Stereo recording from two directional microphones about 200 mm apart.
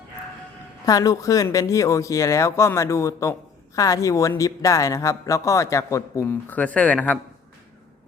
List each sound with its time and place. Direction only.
0.9 s speech: 15° left (ahead or behind)